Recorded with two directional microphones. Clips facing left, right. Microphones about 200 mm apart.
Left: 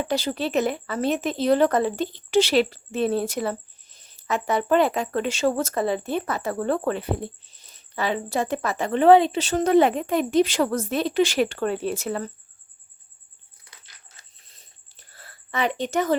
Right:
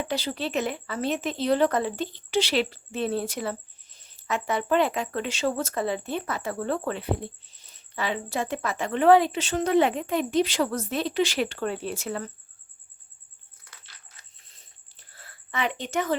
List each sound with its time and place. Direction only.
0.1 s speech: 45° left (ahead or behind); by 9.4 s 25° left (ahead or behind)
9.4 s speech: 40° left (ahead or behind)
15.1 s a sound: 40° left (ahead or behind)